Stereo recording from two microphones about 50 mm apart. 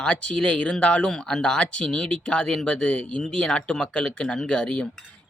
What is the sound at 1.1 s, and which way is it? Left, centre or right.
Speech, centre.